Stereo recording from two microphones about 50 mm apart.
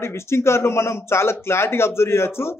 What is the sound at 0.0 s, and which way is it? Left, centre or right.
Speech, left.